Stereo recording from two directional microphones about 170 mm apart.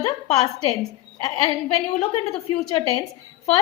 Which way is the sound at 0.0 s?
35° left (ahead or behind).